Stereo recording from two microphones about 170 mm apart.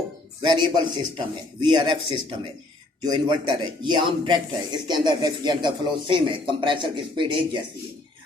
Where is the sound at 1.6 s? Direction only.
30° right (ahead or behind).